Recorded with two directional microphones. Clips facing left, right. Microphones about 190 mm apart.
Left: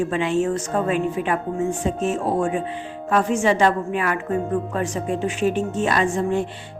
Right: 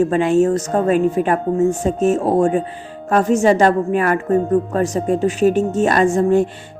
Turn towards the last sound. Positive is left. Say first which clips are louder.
# right 7 dB
turn(degrees=-45)  # may be behind; listen again after turning